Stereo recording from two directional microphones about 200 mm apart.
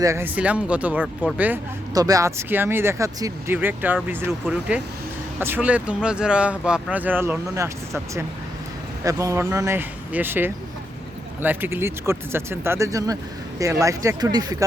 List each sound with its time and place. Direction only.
0.0 s speech: 15° right (ahead or behind)
9.0 s speech: 15° right (ahead or behind)